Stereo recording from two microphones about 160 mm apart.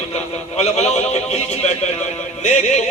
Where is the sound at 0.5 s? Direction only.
45° left (ahead or behind).